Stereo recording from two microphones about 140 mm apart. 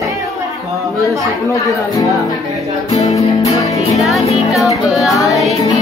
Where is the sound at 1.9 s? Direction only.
25° left (ahead or behind).